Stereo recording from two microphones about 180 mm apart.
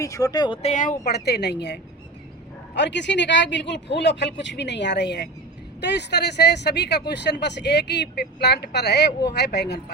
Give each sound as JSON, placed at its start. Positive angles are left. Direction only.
{"t": 0.0, "sound": "speech", "side_deg": 20}
{"t": 0.7, "sound": "speech", "side_deg": 45}